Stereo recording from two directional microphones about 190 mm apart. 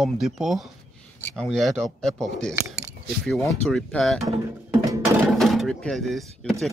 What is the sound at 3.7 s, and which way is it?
Speech, 5° left (ahead or behind).